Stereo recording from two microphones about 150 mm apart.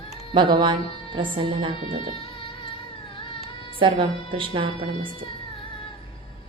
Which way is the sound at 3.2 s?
35° left (ahead or behind).